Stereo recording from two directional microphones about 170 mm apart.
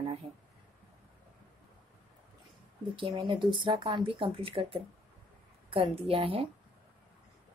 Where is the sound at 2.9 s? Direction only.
30° right (ahead or behind).